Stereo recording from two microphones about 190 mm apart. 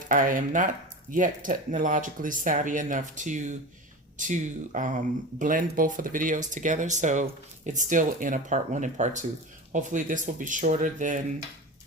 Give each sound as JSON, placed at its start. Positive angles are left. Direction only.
{"t": 0.1, "sound": "speech", "side_deg": -45}